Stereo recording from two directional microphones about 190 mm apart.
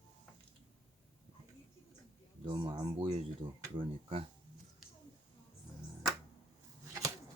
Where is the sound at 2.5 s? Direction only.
25° right (ahead or behind).